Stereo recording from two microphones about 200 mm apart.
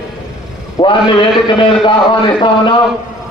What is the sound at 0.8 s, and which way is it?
A man's voice, 25° left (ahead or behind).